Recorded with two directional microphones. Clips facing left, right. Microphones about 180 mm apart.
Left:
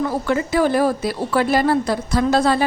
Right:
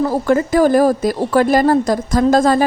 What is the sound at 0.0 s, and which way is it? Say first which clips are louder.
A woman's voice: right 5 dB; 40° right (ahead or behind).